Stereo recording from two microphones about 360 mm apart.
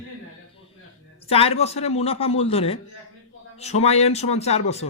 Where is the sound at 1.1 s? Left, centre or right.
Centre.